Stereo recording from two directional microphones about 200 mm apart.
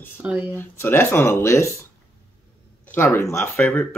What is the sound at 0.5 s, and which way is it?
Speech, 10° left (ahead or behind).